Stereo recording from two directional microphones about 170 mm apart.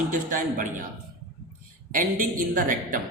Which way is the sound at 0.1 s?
50° right (ahead or behind).